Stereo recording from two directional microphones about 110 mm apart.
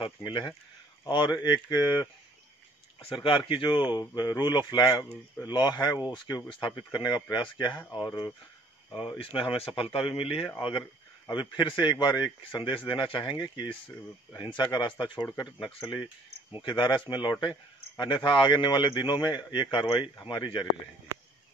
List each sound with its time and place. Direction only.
0.2 s a man's voice: 40° left (ahead or behind)
3.1 s a man's voice: 50° left (ahead or behind)
9.2 s speech: 55° left (ahead or behind)
11.2 s a man's voice: 45° left (ahead or behind)